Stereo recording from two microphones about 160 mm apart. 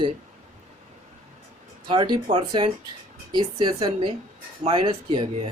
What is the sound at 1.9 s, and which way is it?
Speech, 30° right (ahead or behind).